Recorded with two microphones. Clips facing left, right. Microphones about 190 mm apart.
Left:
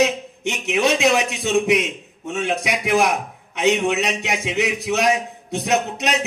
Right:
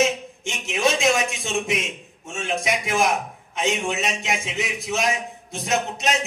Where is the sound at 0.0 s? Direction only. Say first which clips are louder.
Left 3 dB; 65° left (ahead or behind).